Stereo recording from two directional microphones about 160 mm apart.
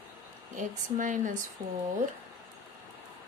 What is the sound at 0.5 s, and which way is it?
Speech, 55° right (ahead or behind).